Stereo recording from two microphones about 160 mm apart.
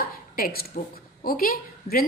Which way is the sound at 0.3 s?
70° left (ahead or behind).